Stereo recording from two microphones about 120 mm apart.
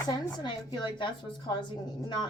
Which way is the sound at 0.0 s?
35° left (ahead or behind).